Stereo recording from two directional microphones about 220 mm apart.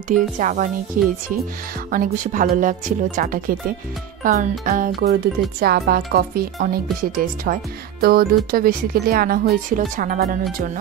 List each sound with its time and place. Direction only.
0.1 s speech: 35° right (ahead or behind)